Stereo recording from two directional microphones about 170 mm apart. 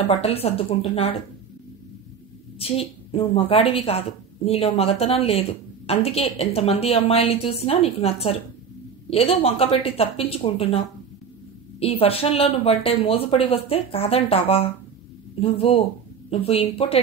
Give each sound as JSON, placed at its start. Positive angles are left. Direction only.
{"t": 0.1, "sound": "a woman's voice", "side_deg": 35}
{"t": 2.6, "sound": "a woman's voice", "side_deg": 35}
{"t": 11.8, "sound": "a woman's voice", "side_deg": 35}